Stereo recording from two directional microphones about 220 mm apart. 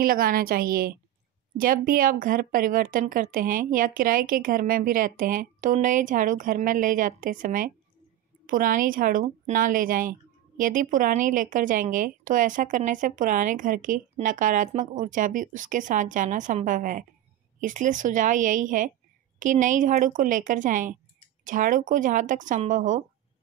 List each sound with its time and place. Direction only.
0.0 s speech: 40° right (ahead or behind)